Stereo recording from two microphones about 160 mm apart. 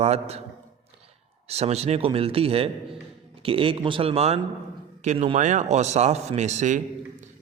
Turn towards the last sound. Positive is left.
turn(degrees=-50)  # may be behind; listen again after turning